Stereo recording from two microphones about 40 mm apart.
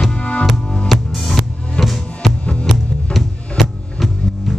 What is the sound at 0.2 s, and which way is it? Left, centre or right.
Music, left.